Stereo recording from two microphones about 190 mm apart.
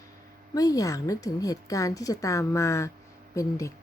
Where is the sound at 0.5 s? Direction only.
20° left (ahead or behind).